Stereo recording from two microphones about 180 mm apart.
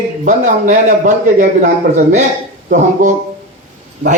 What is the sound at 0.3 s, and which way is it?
Speech, 45° right (ahead or behind).